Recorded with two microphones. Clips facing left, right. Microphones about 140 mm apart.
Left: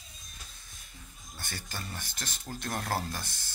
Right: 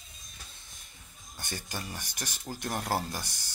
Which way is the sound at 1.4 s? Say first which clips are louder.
Right 3 dB; 15° right (ahead or behind).